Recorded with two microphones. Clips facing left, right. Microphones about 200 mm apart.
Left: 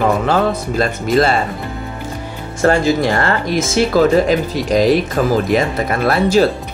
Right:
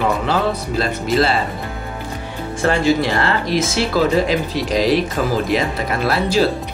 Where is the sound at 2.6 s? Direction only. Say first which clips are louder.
Left 3 dB; 45° left (ahead or behind).